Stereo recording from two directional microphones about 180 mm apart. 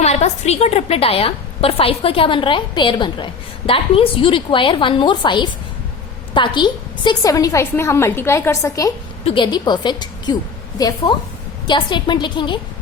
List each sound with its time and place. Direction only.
0.0 s a woman's voice: 35° left (ahead or behind); by 8.9 s 15° left (ahead or behind)
9.2 s a woman's voice: 25° left (ahead or behind)